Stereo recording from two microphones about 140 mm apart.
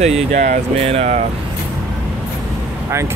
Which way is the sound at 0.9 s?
50° right (ahead or behind).